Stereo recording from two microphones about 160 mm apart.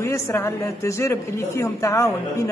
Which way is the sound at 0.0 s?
15° left (ahead or behind).